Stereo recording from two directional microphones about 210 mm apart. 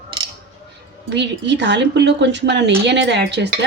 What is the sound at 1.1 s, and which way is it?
A woman's voice, 55° right (ahead or behind).